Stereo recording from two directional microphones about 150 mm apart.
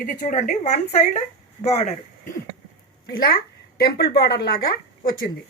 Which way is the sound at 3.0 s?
90° left.